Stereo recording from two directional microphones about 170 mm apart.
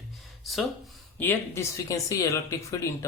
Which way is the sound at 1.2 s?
15° left (ahead or behind).